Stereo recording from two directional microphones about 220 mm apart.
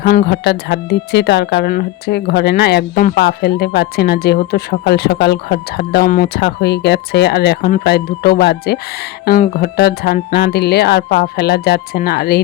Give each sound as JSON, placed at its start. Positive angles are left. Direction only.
{"t": 0.0, "sound": "speech", "side_deg": 45}